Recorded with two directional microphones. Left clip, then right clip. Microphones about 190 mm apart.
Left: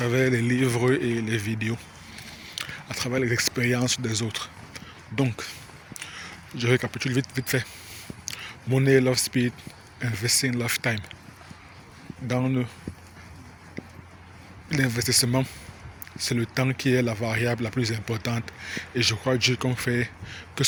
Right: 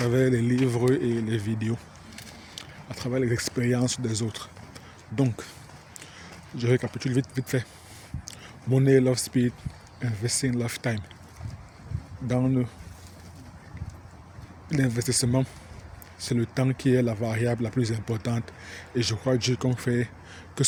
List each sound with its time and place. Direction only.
0.0 s speech: 25° right (ahead or behind)
6.0 s speech: 10° right (ahead or behind)
12.3 s speech: 25° right (ahead or behind)
14.7 s speech: 20° right (ahead or behind)